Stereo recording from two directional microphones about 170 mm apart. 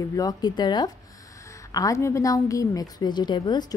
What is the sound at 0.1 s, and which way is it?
A woman's voice, 20° left (ahead or behind).